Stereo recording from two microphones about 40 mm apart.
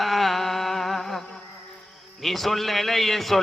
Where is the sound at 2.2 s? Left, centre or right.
Centre.